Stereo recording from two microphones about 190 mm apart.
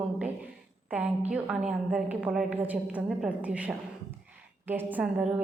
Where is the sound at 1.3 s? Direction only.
5° right (ahead or behind).